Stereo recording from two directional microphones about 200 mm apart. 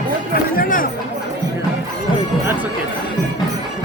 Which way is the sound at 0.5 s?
45° left (ahead or behind).